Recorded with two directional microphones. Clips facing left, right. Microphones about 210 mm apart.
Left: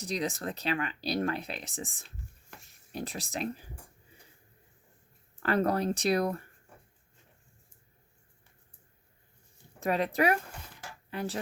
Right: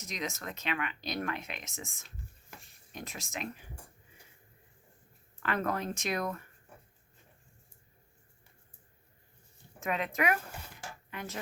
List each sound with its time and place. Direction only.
0.0 s speech: 35° left (ahead or behind)
5.4 s speech: 35° left (ahead or behind)
9.8 s speech: 35° left (ahead or behind)